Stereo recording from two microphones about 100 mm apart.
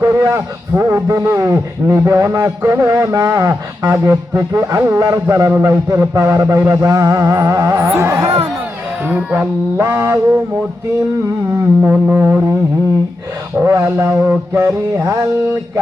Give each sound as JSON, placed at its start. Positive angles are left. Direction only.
{"t": 0.0, "sound": "a man's voice", "side_deg": -30}
{"t": 9.7, "sound": "a sound", "side_deg": -30}
{"t": 11.8, "sound": "a man's voice", "side_deg": -20}
{"t": 13.6, "sound": "a man's voice", "side_deg": -30}